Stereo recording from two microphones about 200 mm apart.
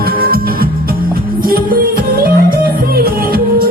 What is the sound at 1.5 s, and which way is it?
Music, 45° right (ahead or behind).